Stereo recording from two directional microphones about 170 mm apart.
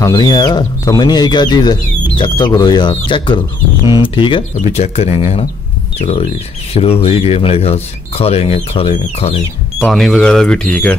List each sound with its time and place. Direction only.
0.0 s speech: 25° left (ahead or behind)
4.6 s speech: 40° left (ahead or behind)
9.8 s speech: 5° left (ahead or behind)